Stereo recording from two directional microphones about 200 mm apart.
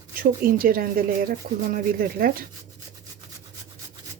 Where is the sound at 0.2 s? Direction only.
45° right (ahead or behind).